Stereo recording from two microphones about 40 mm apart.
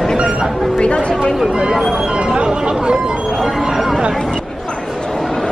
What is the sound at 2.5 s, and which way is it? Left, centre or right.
Chatter, centre.